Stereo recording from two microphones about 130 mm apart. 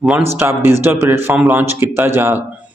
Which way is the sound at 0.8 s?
15° right (ahead or behind).